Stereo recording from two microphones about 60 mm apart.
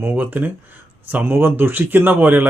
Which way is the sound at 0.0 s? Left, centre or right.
Right.